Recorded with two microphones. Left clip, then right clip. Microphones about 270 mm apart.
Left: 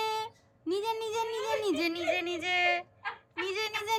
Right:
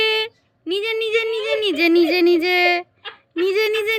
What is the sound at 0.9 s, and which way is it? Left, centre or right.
Speech, centre.